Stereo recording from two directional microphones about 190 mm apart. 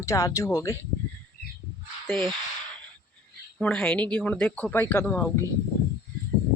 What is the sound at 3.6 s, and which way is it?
Speech, 5° left (ahead or behind).